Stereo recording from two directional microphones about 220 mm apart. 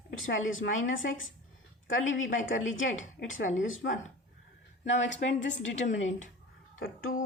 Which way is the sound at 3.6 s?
60° left (ahead or behind).